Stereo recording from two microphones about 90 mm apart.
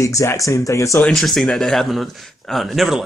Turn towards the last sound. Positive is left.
turn(degrees=0)  # may be behind; listen again after turning